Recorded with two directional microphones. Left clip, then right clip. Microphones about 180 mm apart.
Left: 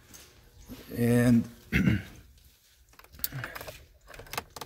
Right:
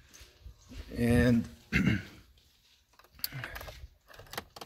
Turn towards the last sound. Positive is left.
turn(degrees=0)  # may be behind; listen again after turning